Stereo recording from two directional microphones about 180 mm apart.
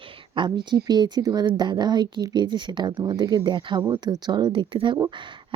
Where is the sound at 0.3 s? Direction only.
25° right (ahead or behind).